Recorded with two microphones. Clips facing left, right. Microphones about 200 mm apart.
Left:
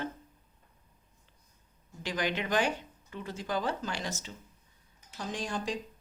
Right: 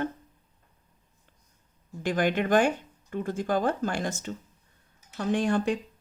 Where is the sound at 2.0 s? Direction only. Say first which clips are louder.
Right 7 dB; 50° right (ahead or behind).